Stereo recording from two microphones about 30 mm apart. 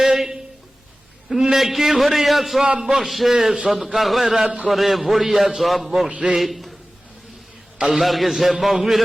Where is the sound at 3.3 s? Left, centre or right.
Centre.